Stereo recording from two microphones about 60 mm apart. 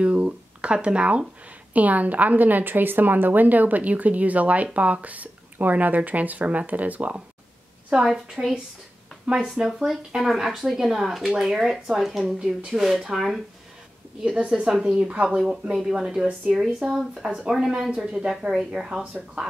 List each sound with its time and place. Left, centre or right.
0.0 s a woman's voice: right
8.1 s speech: centre
9.2 s speech: centre
14.2 s speech: centre